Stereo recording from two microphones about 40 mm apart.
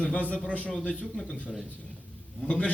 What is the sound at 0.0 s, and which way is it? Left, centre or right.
A man's voice, left.